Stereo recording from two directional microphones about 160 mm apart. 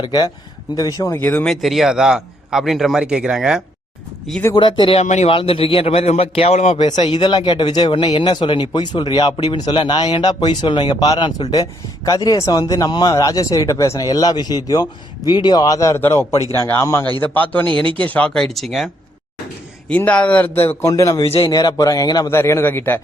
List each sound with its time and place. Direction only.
0.0 s speech: 25° left (ahead or behind)
1.1 s a man's voice: 10° left (ahead or behind)
4.3 s a man's voice: 10° left (ahead or behind)
4.5 s a man's voice: 30° left (ahead or behind); by 17.7 s 10° left (ahead or behind)
17.7 s speech: 30° right (ahead or behind)
18.0 s a man's voice: 10° left (ahead or behind)
19.9 s a man's voice: 10° left (ahead or behind)
21.2 s a man's voice: 35° left (ahead or behind)
21.4 s speech: 25° left (ahead or behind)